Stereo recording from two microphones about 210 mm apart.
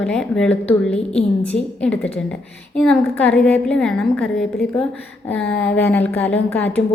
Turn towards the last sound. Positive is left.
turn(degrees=5)  # may be behind; listen again after turning